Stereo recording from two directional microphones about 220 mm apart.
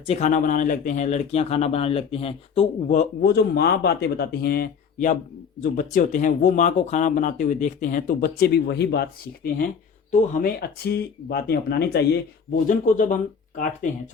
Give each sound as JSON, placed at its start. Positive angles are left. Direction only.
{"t": 0.0, "sound": "speech", "side_deg": 30}
{"t": 12.6, "sound": "speech", "side_deg": 35}